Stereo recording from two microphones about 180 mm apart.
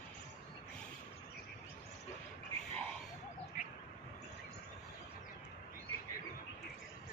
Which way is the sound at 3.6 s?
45° left (ahead or behind).